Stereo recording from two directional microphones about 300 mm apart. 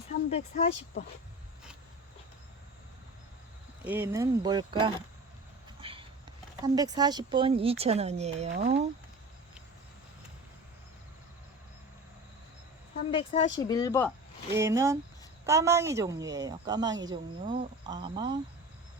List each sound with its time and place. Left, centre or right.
0.1 s speech: left
3.8 s speech: centre
5.8 s a sound: centre
6.7 s speech: centre
13.1 s speech: centre
14.5 s speech: centre
17.4 s speech: right
17.8 s speech: centre